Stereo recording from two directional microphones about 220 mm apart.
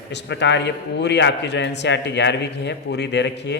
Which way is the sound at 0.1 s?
50° left (ahead or behind).